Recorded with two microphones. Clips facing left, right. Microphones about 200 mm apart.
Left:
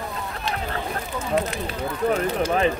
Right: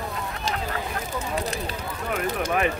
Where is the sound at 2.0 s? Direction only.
30° left (ahead or behind).